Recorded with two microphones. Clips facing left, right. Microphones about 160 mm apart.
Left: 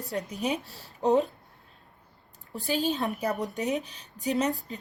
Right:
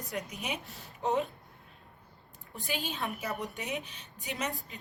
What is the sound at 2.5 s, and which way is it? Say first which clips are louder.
A woman's voice: left 8 dB; 40° left (ahead or behind).